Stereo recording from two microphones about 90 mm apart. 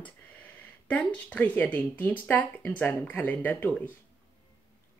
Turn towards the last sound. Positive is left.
turn(degrees=20)  # may be behind; listen again after turning